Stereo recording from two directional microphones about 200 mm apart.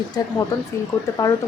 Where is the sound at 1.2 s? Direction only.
15° left (ahead or behind).